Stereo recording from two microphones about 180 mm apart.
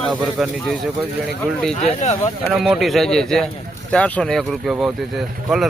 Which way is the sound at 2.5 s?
Centre (ahead or behind).